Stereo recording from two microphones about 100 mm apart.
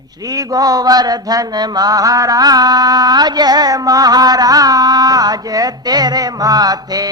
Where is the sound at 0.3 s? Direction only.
40° right (ahead or behind).